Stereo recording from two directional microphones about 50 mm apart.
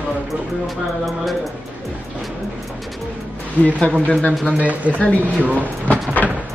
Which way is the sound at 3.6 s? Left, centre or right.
Left.